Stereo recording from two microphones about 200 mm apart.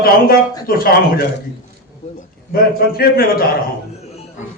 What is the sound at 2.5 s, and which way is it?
Speech, 50° left (ahead or behind).